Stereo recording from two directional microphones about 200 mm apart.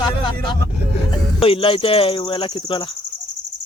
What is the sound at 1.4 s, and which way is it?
Speech, 25° left (ahead or behind).